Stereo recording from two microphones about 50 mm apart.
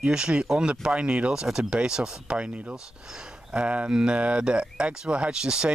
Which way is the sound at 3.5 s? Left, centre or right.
Right.